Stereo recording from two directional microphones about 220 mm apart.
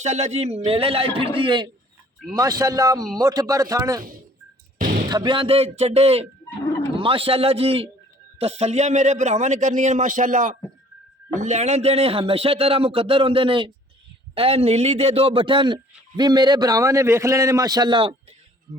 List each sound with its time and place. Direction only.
0.0 s speech: 30° right (ahead or behind); by 4.0 s 15° right (ahead or behind)
4.8 s music: 35° right (ahead or behind)
5.0 s speech: 20° right (ahead or behind)